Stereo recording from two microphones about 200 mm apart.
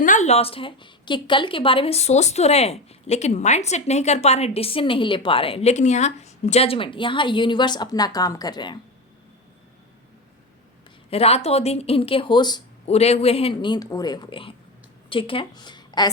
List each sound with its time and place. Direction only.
0.0 s a woman's voice: 40° left (ahead or behind); by 8.8 s 20° left (ahead or behind)
11.1 s a woman's voice: 30° left (ahead or behind)